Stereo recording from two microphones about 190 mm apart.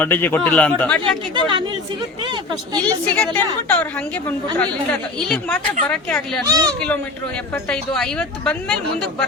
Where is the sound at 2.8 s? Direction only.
5° left (ahead or behind).